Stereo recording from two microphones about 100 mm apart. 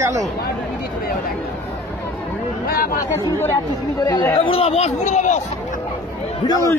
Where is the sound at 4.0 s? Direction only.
45° left (ahead or behind).